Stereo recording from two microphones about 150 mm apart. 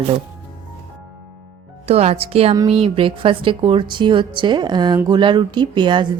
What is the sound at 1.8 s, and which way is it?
A woman's voice, 45° right (ahead or behind).